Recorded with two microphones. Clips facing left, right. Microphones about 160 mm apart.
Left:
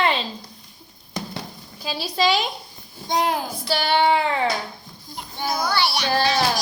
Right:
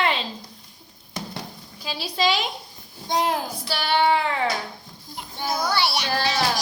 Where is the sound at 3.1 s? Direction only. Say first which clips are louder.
Left 1 dB; centre (ahead or behind).